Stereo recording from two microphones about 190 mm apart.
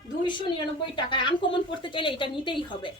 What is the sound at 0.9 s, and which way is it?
A woman's voice, 25° left (ahead or behind).